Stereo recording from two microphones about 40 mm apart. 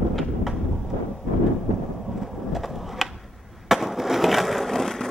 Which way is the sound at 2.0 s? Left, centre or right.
Centre.